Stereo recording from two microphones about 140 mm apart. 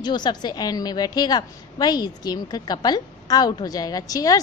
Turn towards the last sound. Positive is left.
turn(degrees=25)  # may be behind; listen again after turning